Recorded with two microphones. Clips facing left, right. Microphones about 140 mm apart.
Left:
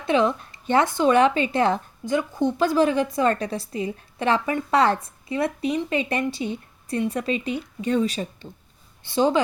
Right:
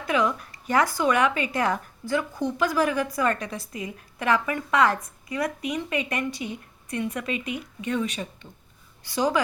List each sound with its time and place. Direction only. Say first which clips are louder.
0.0 s speech: left 4 dB; 25° left (ahead or behind)